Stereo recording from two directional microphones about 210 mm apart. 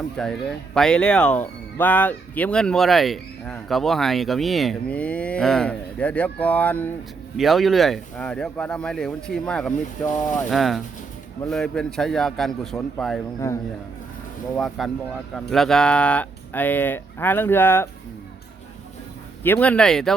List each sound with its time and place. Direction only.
0.2 s speech: 5° left (ahead or behind)
10.2 s speech: 35° left (ahead or behind)
10.5 s speech: centre (ahead or behind)
14.5 s speech: centre (ahead or behind)
19.4 s speech: 10° left (ahead or behind)